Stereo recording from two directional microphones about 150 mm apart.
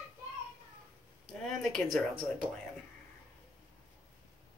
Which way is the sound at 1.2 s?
Centre (ahead or behind).